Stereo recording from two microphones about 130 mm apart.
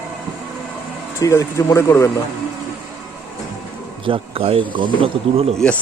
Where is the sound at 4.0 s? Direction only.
45° right (ahead or behind).